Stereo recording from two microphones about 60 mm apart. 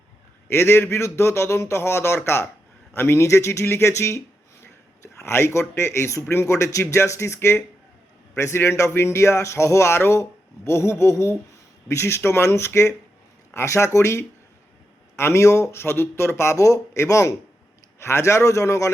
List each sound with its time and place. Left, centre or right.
0.5 s speech: left
3.2 s speech: left
5.2 s speech: left